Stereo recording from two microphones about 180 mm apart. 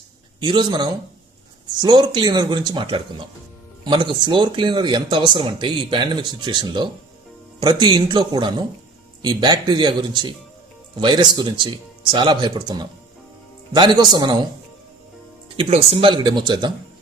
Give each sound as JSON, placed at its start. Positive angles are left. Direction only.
{"t": 0.3, "sound": "speech", "side_deg": -25}
{"t": 15.5, "sound": "speech", "side_deg": -30}